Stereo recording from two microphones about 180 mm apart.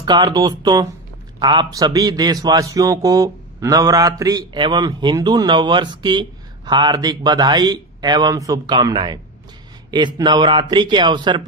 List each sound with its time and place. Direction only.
0.0 s a man's voice: 25° right (ahead or behind)